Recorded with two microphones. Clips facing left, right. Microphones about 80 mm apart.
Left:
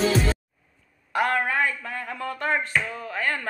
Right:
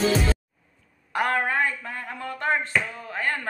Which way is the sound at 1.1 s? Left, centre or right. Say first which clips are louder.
Left 1 dB; right.